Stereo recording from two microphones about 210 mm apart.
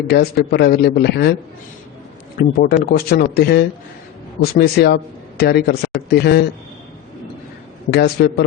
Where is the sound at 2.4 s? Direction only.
45° left (ahead or behind).